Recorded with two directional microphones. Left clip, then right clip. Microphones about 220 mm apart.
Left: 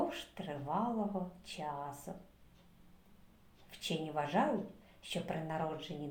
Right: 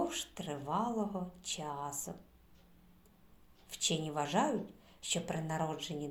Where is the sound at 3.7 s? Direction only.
35° right (ahead or behind).